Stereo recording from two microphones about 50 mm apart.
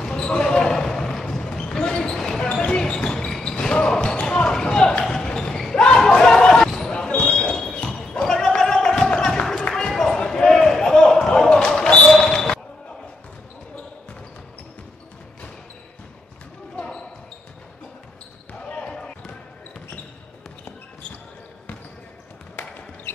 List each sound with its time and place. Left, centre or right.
0.0 s basketball bounce: centre
8.1 s a sound: centre
9.8 s basketball bounce: centre
16.7 s basketball bounce: centre
18.6 s basketball bounce: left
22.6 s a sound: left